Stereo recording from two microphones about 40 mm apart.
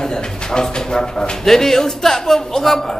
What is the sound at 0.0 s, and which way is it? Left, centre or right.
A man's voice, centre.